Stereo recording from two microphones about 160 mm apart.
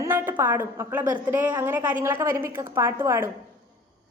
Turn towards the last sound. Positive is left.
turn(degrees=-15)  # may be behind; listen again after turning